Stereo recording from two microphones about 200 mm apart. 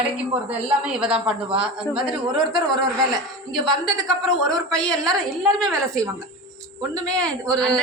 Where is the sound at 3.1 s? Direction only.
20° right (ahead or behind).